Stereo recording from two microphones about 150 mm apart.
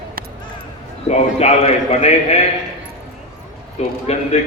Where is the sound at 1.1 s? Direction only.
45° left (ahead or behind).